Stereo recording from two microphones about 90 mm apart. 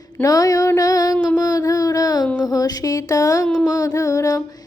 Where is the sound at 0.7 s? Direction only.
45° left (ahead or behind).